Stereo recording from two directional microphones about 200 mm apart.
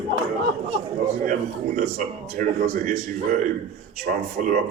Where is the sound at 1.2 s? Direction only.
40° right (ahead or behind).